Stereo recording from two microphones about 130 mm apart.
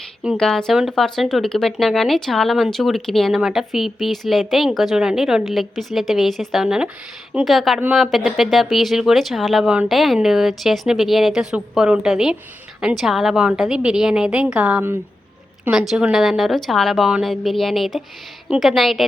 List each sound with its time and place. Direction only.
0.3 s speech: 5° left (ahead or behind)